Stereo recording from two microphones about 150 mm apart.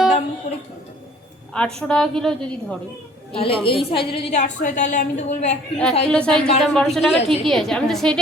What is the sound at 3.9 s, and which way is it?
A woman's voice, 40° left (ahead or behind).